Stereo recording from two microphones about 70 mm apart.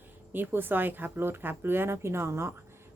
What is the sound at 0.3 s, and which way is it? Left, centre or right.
A woman's voice, right.